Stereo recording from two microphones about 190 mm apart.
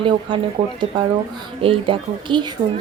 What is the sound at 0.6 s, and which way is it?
Speech, 25° right (ahead or behind).